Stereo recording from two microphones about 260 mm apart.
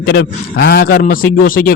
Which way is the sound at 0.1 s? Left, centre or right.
Left.